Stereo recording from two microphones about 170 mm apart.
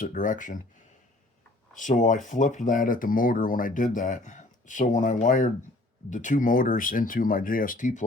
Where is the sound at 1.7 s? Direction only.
50° left (ahead or behind).